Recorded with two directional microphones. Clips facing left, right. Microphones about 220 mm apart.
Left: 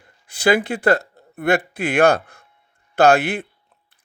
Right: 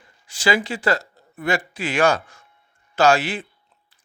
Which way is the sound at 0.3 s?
60° left (ahead or behind).